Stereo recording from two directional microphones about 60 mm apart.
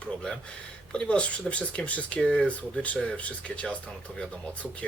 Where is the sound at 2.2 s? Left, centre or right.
Centre.